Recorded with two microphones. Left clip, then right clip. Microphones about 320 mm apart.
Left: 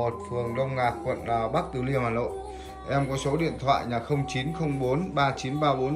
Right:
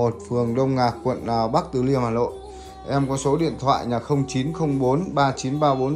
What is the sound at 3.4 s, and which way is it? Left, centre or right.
A man's voice, right.